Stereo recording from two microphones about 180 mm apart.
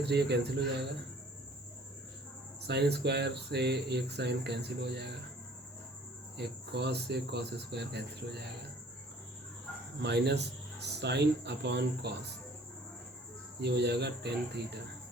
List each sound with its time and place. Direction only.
0.0 s a man's voice: 65° right (ahead or behind)
2.6 s speech: 65° right (ahead or behind)
6.3 s speech: 65° right (ahead or behind)
10.0 s speech: 70° right (ahead or behind)
13.6 s speech: 70° right (ahead or behind)